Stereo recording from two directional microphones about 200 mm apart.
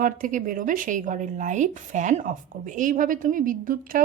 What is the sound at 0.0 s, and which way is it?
A woman's voice, 40° right (ahead or behind).